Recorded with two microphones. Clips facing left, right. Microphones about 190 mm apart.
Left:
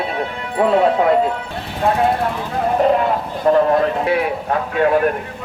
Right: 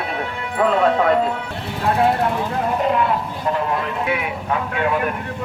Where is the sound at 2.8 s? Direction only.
40° left (ahead or behind).